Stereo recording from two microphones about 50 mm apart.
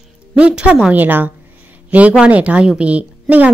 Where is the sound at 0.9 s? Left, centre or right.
Right.